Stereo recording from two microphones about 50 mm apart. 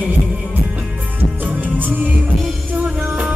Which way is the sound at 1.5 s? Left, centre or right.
Right.